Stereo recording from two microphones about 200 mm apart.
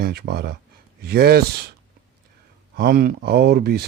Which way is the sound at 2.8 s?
45° right (ahead or behind).